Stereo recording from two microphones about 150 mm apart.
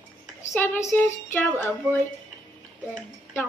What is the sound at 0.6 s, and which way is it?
Speech, 15° left (ahead or behind).